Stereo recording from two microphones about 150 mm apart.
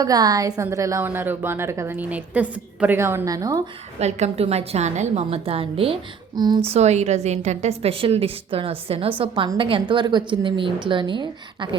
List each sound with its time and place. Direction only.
0.0 s a woman's voice: 25° right (ahead or behind)
4.0 s a woman's voice: 45° right (ahead or behind)
6.3 s speech: 30° right (ahead or behind)
6.7 s a woman's voice: 45° right (ahead or behind)